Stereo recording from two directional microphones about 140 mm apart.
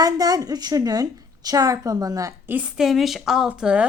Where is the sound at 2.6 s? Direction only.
5° right (ahead or behind).